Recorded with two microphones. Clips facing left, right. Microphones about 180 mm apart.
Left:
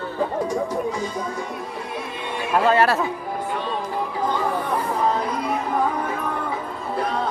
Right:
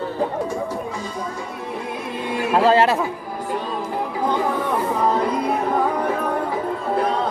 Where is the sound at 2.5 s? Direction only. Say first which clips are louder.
Right 2 dB; 30° right (ahead or behind).